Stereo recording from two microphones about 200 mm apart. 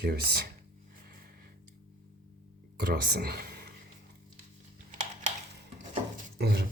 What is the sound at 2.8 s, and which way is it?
Speech, 55° right (ahead or behind).